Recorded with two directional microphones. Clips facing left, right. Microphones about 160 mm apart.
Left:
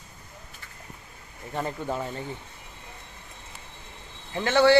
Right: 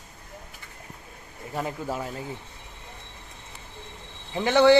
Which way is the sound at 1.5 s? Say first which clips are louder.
Even; 5° right (ahead or behind).